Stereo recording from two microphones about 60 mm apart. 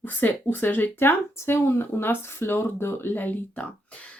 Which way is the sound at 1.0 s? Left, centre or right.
Left.